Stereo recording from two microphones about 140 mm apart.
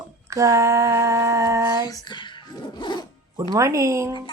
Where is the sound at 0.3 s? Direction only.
20° right (ahead or behind).